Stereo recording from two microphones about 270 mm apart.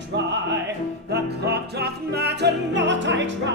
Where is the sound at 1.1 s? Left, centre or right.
Right.